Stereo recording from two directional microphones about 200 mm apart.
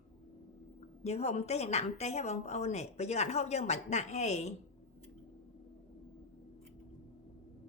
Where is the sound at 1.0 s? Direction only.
35° left (ahead or behind).